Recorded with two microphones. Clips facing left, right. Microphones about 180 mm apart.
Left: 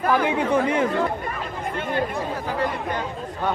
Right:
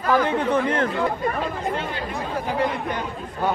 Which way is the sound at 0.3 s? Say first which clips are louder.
Even; 10° left (ahead or behind).